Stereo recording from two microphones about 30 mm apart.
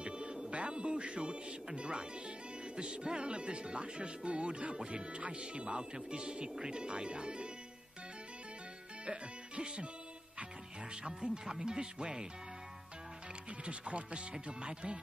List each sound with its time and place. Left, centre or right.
0.0 s music: right
1.8 s speech: right
9.0 s music: right
11.1 s speech: centre
13.7 s speech: right